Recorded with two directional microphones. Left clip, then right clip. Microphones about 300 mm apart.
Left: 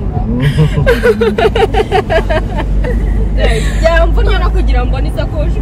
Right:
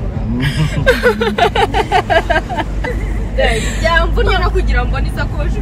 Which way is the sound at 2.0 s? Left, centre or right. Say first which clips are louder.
Right 2 dB; right.